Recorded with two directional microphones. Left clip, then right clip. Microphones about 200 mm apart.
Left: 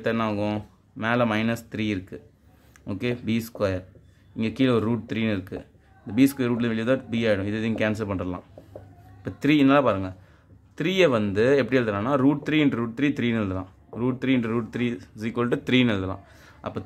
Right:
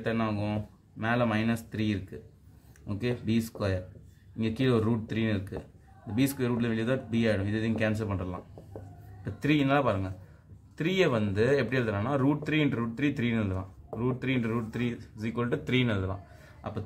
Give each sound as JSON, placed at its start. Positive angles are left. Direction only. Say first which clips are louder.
{"t": 0.0, "sound": "speech", "louder": "left 6 dB", "side_deg": 45}